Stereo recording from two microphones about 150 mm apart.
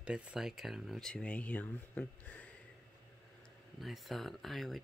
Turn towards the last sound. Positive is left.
turn(degrees=0)  # may be behind; listen again after turning